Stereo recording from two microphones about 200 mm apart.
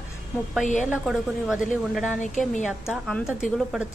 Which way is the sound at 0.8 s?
5° right (ahead or behind).